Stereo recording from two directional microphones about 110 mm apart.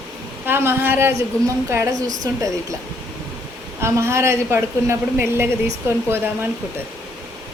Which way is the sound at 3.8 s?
25° right (ahead or behind).